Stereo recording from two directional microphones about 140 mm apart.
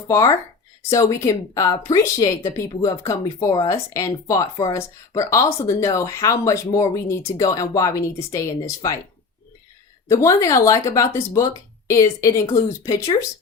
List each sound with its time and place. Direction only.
0.1 s speech: 20° left (ahead or behind)
10.1 s speech: 20° left (ahead or behind)